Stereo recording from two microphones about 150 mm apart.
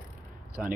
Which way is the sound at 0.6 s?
5° right (ahead or behind).